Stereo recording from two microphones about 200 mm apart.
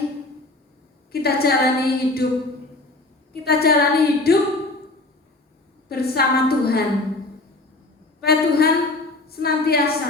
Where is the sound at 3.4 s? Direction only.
50° left (ahead or behind).